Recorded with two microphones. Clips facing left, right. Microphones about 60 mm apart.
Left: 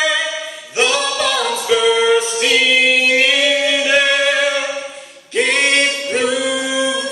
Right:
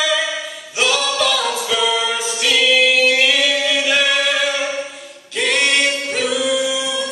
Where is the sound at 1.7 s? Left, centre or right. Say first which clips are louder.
Left 8 dB; left.